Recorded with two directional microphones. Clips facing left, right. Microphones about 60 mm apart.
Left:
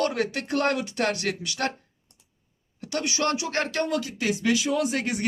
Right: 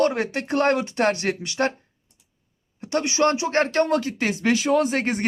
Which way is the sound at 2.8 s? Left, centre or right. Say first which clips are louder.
Right 6 dB; right.